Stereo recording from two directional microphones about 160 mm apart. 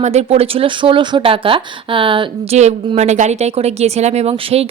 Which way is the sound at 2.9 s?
45° right (ahead or behind).